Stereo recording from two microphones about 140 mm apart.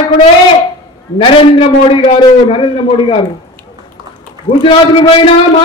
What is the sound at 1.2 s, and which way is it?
A man's voice, 40° left (ahead or behind).